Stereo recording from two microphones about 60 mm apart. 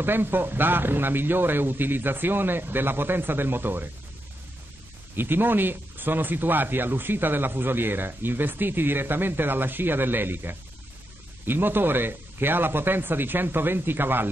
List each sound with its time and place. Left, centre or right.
0.0 s speech: right
5.1 s speech: right